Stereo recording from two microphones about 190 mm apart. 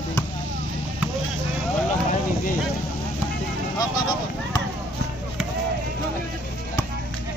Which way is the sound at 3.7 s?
20° left (ahead or behind).